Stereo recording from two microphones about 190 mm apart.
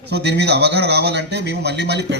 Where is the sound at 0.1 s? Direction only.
65° right (ahead or behind).